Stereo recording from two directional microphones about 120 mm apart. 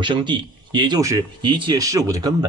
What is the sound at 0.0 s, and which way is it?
Speech, 40° right (ahead or behind).